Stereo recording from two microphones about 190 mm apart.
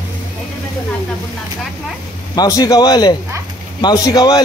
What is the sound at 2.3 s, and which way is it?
A man's voice, 20° left (ahead or behind).